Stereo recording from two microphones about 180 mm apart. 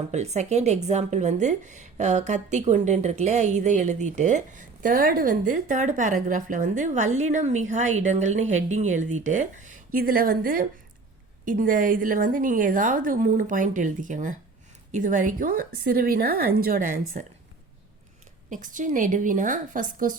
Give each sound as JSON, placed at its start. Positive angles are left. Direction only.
{"t": 0.1, "sound": "a woman's voice", "side_deg": -40}
{"t": 17.2, "sound": "a woman's voice", "side_deg": -45}
{"t": 18.5, "sound": "a woman's voice", "side_deg": -45}